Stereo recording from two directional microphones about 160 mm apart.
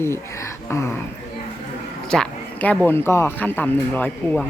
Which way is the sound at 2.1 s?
5° left (ahead or behind).